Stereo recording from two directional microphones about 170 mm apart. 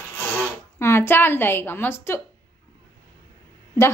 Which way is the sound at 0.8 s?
15° left (ahead or behind).